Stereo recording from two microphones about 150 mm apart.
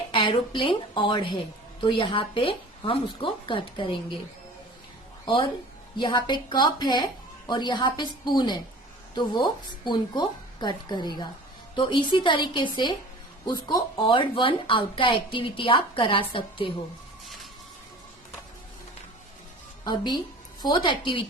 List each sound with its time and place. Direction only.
0.1 s speech: 35° left (ahead or behind)
5.2 s a woman's voice: 35° left (ahead or behind)
9.8 s speech: 30° left (ahead or behind)
17.2 s music: centre (ahead or behind)
19.8 s a woman's voice: 30° left (ahead or behind)